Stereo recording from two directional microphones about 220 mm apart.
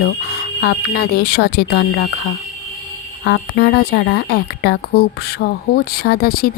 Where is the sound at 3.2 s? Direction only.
50° left (ahead or behind).